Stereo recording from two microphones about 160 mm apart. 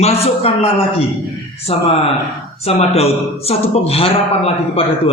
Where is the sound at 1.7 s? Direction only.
35° left (ahead or behind).